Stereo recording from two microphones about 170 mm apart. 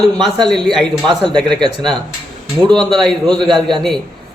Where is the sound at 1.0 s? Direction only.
25° right (ahead or behind).